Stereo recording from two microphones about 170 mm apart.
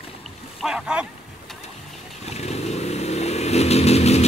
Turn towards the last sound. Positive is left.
turn(degrees=40)  # may be behind; listen again after turning